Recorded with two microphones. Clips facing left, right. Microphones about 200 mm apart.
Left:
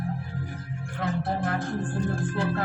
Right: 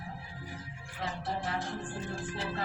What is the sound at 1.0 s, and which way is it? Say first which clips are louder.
Music: left 8 dB; 55° left (ahead or behind).